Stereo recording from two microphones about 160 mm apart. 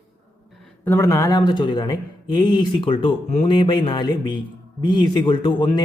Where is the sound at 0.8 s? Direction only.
15° left (ahead or behind).